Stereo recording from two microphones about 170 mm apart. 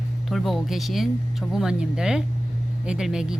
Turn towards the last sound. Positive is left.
turn(degrees=-5)  # may be behind; listen again after turning